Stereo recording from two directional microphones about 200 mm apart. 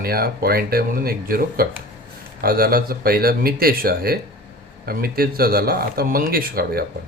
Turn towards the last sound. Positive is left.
turn(degrees=-50)  # may be behind; listen again after turning